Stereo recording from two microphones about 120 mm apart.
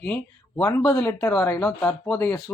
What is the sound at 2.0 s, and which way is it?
Speech, 10° left (ahead or behind).